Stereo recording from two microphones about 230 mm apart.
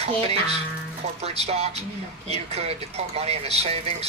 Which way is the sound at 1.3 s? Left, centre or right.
Right.